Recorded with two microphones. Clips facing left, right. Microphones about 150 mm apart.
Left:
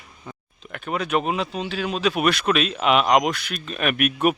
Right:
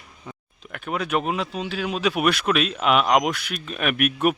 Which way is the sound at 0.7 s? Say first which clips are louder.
Left 1 dB; 5° right (ahead or behind).